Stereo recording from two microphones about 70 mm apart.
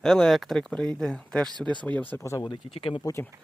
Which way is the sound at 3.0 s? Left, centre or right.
Left.